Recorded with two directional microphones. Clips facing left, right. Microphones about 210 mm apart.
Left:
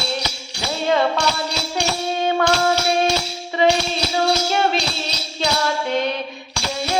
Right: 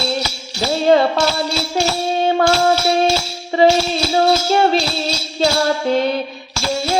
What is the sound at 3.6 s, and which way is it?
Music, 35° right (ahead or behind).